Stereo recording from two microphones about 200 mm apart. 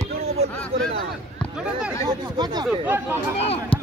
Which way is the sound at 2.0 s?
20° right (ahead or behind).